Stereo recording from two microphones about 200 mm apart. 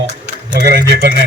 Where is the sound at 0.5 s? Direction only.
55° right (ahead or behind).